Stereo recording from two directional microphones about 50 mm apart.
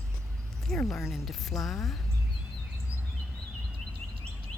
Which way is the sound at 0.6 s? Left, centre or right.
Centre.